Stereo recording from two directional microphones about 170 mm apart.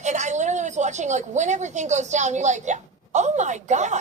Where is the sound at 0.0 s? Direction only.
45° right (ahead or behind).